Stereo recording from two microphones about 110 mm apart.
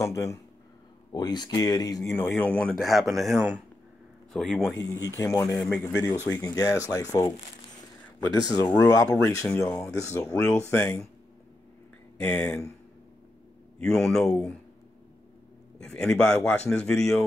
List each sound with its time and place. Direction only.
0.0 s speech: 30° left (ahead or behind)
1.1 s speech: 40° left (ahead or behind)
2.0 s speech: 20° left (ahead or behind)
2.8 s a man's voice: centre (ahead or behind)
5.0 s speech: 30° left (ahead or behind)
5.6 s speech: 10° left (ahead or behind)
6.2 s speech: 25° left (ahead or behind)
12.2 s speech: 15° left (ahead or behind)
13.7 s speech: 5° left (ahead or behind)
15.8 s speech: 5° left (ahead or behind)